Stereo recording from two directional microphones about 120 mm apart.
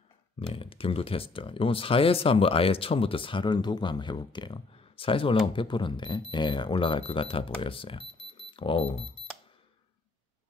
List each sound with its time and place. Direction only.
0.5 s speech: 50° left (ahead or behind)